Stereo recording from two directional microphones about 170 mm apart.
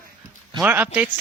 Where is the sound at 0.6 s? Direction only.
10° right (ahead or behind).